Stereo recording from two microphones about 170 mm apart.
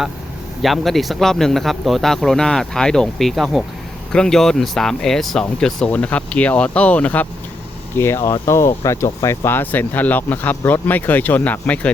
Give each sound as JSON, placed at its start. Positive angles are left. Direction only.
{"t": 0.6, "sound": "speech", "side_deg": 0}